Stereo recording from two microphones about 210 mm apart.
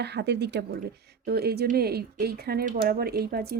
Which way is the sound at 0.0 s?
55° right (ahead or behind).